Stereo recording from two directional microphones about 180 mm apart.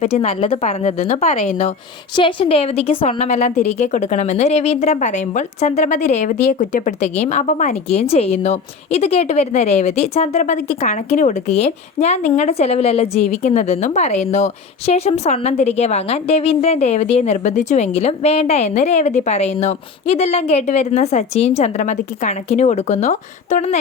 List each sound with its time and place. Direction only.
0.0 s a woman's voice: 35° left (ahead or behind)
2.1 s a woman's voice: 30° left (ahead or behind)